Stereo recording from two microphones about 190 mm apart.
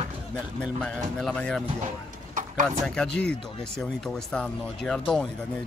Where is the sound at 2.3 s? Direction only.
40° right (ahead or behind).